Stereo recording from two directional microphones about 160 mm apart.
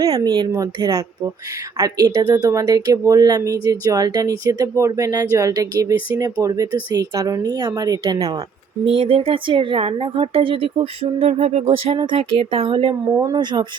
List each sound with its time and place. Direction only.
0.0 s speech: 25° right (ahead or behind)
13.1 s speech: 20° right (ahead or behind)